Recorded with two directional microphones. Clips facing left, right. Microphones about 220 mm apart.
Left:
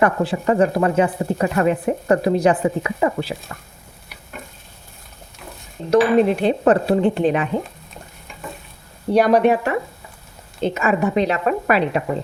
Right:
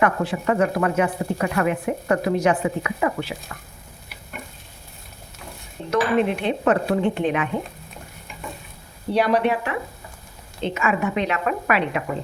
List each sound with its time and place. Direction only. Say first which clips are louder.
0.0 s speech: left 3 dB; 30° left (ahead or behind)
5.9 s speech: left 6 dB; 35° left (ahead or behind)
9.1 s speech: left 5 dB; 45° left (ahead or behind)